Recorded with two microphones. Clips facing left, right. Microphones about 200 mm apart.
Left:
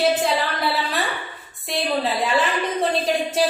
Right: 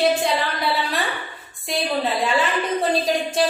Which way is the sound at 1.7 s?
Centre (ahead or behind).